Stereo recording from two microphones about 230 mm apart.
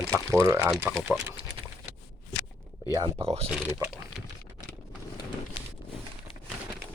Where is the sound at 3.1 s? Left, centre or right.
Right.